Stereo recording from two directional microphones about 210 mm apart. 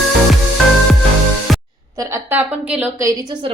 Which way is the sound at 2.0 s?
10° right (ahead or behind).